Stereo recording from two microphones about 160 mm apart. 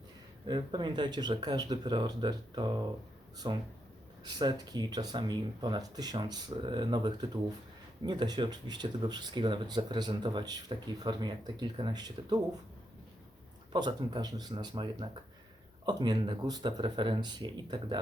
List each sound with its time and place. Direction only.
0.4 s speech: 30° right (ahead or behind)
13.7 s speech: 25° right (ahead or behind)